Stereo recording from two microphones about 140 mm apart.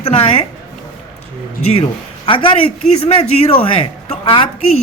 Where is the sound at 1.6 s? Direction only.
45° left (ahead or behind).